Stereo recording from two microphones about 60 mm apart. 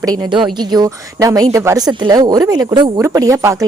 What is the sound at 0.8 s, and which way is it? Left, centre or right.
Speech, right.